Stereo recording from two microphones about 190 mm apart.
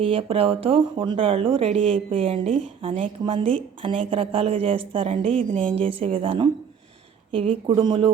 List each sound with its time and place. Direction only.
0.0 s speech: 30° right (ahead or behind)